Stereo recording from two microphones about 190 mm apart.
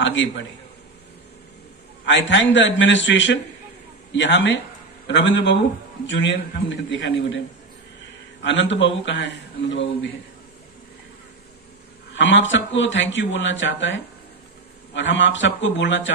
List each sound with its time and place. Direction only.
0.0 s speech: 75° left (ahead or behind)
2.0 s speech: 75° left (ahead or behind)
12.2 s speech: 75° left (ahead or behind)